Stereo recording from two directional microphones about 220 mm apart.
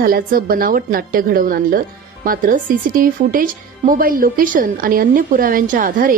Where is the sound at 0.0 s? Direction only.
40° right (ahead or behind).